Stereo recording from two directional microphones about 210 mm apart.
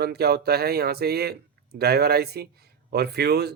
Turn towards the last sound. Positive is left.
turn(degrees=-50)  # may be behind; listen again after turning